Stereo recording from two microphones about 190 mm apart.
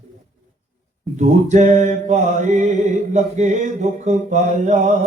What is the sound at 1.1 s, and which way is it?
Mantra, 40° right (ahead or behind).